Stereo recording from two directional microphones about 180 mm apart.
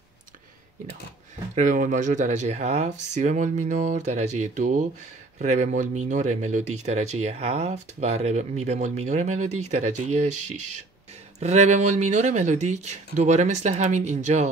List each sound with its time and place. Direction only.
1.5 s speech: 45° right (ahead or behind)
11.3 s speech: 40° right (ahead or behind)